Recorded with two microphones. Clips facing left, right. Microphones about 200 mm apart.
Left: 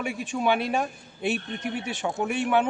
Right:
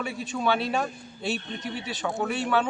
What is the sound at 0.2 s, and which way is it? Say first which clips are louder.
A man's voice: left 1 dB; 15° left (ahead or behind).